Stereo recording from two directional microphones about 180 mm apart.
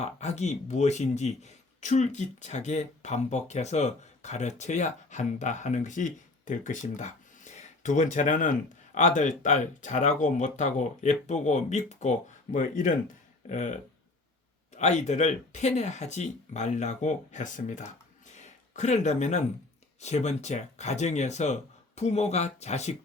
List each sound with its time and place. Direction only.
0.0 s speech: 40° left (ahead or behind)